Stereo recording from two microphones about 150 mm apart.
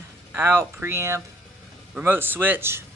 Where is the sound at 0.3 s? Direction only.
15° right (ahead or behind).